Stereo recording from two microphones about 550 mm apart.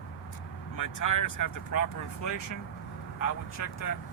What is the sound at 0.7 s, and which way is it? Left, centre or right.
Speech, left.